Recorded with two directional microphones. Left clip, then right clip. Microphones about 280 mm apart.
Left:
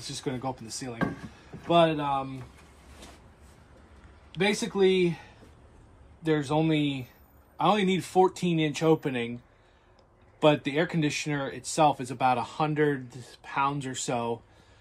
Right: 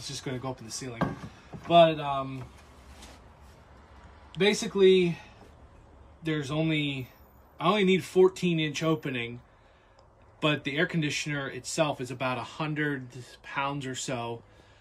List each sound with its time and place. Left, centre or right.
0.1 s speech: centre
0.9 s speech: centre
1.7 s speech: centre
4.4 s speech: centre
6.2 s speech: centre
10.4 s speech: centre